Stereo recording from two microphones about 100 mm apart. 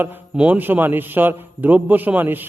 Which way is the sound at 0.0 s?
15° right (ahead or behind).